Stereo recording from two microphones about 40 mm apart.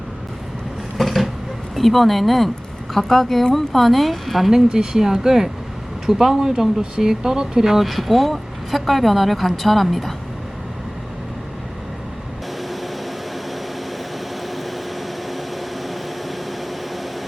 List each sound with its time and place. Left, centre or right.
0.9 s a sound: centre
1.7 s speech: centre
4.5 s speech: centre